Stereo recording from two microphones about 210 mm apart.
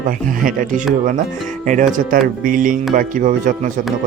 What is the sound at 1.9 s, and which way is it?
Speech, 40° right (ahead or behind).